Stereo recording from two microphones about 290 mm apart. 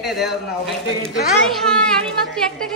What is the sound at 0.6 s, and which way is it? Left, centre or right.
Speech, left.